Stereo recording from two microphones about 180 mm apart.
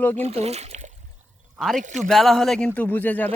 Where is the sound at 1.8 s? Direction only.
40° right (ahead or behind).